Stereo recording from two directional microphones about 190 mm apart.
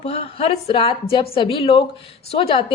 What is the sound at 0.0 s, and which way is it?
A woman's voice, 30° left (ahead or behind).